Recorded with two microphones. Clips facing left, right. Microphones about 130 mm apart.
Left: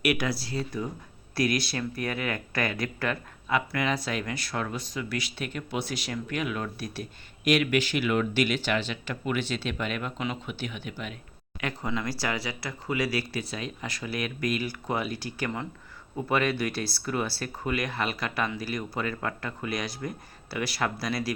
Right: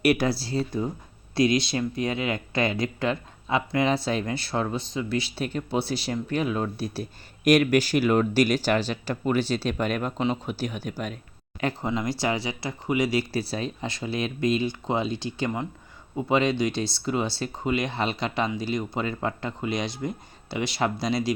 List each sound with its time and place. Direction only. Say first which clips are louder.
0.0 s speech: right 5 dB; 30° right (ahead or behind)
11.6 s speech: right 4 dB; 25° right (ahead or behind)